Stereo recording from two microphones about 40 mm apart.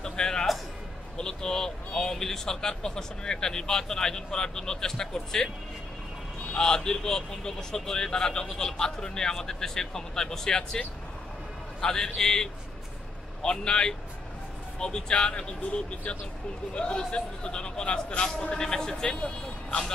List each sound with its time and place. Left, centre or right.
0.0 s music: centre
1.1 s speech: centre
6.5 s speech: centre
11.8 s speech: centre
19.0 s speech: left